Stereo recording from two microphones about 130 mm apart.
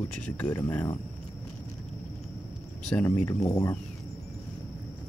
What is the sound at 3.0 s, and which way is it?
Speech, 20° left (ahead or behind).